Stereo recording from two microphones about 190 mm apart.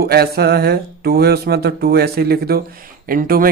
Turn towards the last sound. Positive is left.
turn(degrees=-50)  # may be behind; listen again after turning